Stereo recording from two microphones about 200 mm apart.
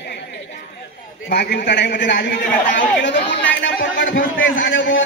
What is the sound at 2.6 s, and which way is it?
Speech, 40° left (ahead or behind).